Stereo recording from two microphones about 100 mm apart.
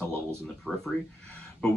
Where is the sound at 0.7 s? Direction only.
5° left (ahead or behind).